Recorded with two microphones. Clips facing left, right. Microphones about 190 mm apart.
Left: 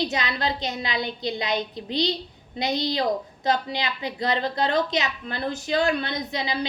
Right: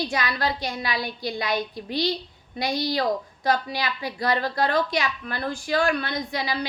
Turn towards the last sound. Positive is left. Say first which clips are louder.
# even
turn(degrees=20)  # may be behind; listen again after turning